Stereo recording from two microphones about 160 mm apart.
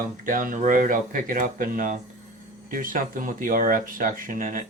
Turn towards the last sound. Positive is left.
turn(degrees=-55)  # may be behind; listen again after turning